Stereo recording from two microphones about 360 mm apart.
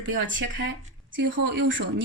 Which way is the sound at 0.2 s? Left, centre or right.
Right.